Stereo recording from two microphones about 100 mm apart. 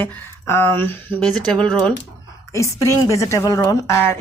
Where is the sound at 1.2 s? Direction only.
5° left (ahead or behind).